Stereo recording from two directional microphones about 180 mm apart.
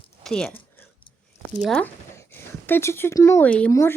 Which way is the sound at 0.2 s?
5° left (ahead or behind).